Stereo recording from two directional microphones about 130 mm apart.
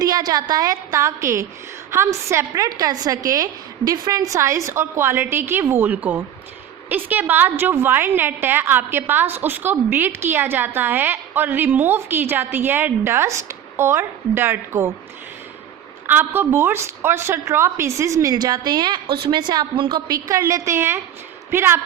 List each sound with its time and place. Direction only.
0.0 s a woman's voice: 30° right (ahead or behind)
16.0 s a woman's voice: 15° right (ahead or behind); by 20.1 s 40° right (ahead or behind)
20.2 s a woman's voice: 25° right (ahead or behind)